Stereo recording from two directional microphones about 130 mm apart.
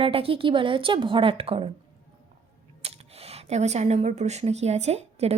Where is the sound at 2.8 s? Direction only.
50° right (ahead or behind).